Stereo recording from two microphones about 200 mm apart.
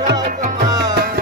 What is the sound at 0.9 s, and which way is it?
Music, 55° right (ahead or behind).